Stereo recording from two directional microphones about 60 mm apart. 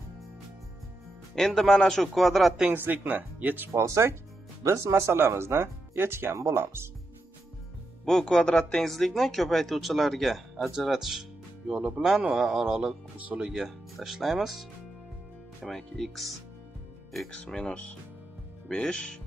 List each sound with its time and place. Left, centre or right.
1.3 s speech: centre
2.7 s speech: right
3.8 s speech: right
6.3 s speech: right
8.0 s speech: centre
8.8 s a man's voice: centre